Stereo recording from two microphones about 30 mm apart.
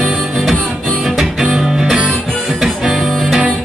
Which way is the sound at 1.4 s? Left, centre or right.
Centre.